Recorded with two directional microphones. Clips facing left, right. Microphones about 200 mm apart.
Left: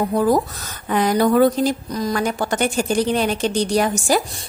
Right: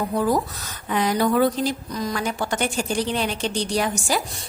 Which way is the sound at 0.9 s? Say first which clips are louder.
Left 4 dB; 50° left (ahead or behind).